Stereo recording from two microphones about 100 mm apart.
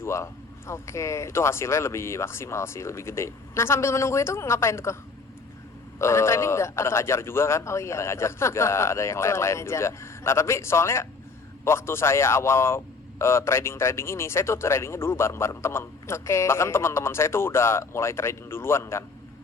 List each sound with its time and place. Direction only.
0.0 s a man's voice: 30° left (ahead or behind)
6.0 s a man's voice: 25° left (ahead or behind)